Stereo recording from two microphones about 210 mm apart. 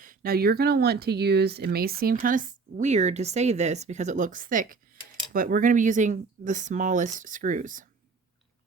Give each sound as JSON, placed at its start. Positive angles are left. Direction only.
{"t": 0.0, "sound": "speech", "side_deg": -40}